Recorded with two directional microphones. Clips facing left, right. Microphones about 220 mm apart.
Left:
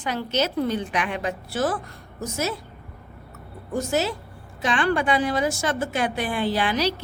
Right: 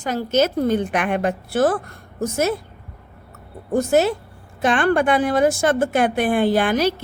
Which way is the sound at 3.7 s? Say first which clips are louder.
Right 7 dB; 55° right (ahead or behind).